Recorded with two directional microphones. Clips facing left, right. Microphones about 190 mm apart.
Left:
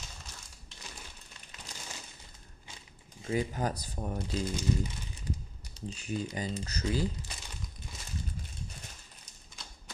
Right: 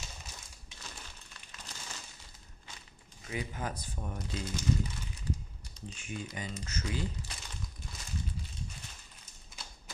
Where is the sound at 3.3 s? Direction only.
35° left (ahead or behind).